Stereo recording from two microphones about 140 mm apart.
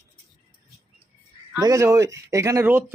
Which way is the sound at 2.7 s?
10° right (ahead or behind).